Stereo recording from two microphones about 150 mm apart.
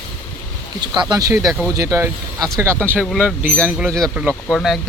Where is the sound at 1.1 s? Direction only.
25° right (ahead or behind).